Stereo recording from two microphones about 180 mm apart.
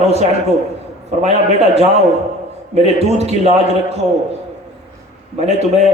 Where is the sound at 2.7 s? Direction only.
35° right (ahead or behind).